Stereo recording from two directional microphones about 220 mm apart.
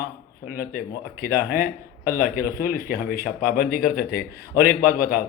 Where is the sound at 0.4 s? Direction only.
40° left (ahead or behind).